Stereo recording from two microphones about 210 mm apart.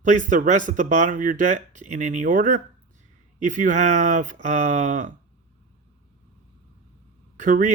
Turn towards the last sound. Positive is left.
turn(degrees=-35)  # may be behind; listen again after turning